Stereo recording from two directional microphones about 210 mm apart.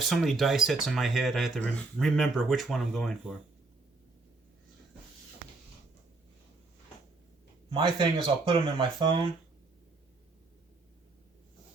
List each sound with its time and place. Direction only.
0.0 s speech: centre (ahead or behind)
7.7 s speech: 20° right (ahead or behind)